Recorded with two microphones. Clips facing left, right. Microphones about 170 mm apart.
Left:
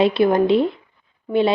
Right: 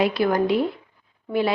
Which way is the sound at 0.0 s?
25° left (ahead or behind).